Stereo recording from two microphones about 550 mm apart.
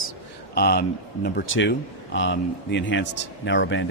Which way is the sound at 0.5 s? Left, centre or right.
Centre.